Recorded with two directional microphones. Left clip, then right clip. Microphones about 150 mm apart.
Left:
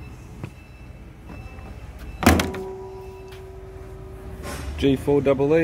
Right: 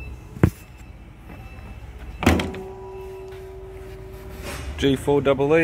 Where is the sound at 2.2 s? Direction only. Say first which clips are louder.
Left 2 dB; 15° left (ahead or behind).